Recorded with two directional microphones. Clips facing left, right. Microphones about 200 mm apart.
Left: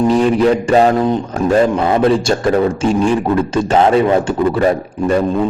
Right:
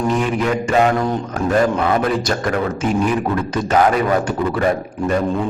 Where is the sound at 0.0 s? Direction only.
30° left (ahead or behind).